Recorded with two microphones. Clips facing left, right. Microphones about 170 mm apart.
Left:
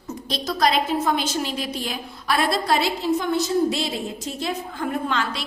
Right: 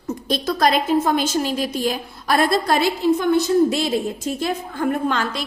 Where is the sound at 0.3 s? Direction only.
50° right (ahead or behind).